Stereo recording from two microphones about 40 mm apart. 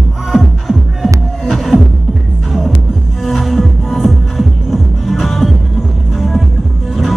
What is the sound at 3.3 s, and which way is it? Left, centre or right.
Music, centre.